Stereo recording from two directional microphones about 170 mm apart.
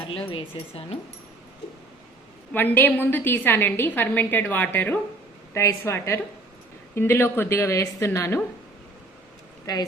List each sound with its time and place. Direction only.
0.1 s speech: 30° left (ahead or behind)
2.5 s a woman's voice: 10° left (ahead or behind)